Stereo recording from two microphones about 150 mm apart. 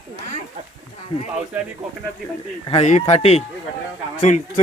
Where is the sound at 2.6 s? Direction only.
45° left (ahead or behind).